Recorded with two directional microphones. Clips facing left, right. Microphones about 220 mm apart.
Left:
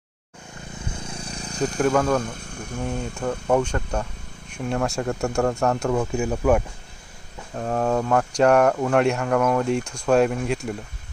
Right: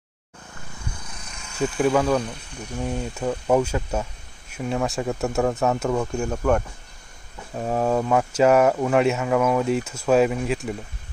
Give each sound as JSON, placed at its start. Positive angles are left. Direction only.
{"t": 0.9, "sound": "a sound", "side_deg": 30}
{"t": 1.8, "sound": "speech", "side_deg": -5}
{"t": 7.5, "sound": "speech", "side_deg": -5}